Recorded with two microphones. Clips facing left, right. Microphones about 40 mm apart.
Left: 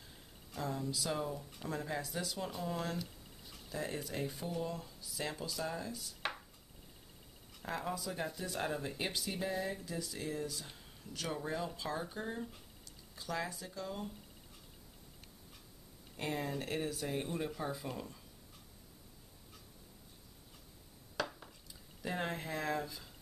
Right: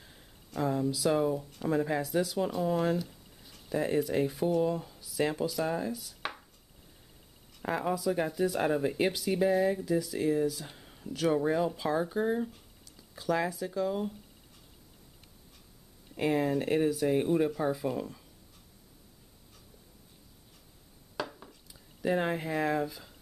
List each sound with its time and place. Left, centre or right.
0.6 s speech: centre
2.0 s speech: centre
5.9 s a sound: centre
7.6 s speech: centre
8.3 s speech: centre
8.5 s speech: centre
9.6 s speech: centre
10.7 s a sound: centre
11.1 s speech: centre
12.4 s a sound: centre
13.1 s speech: centre
16.2 s speech: centre
21.2 s a sound: centre
22.0 s speech: centre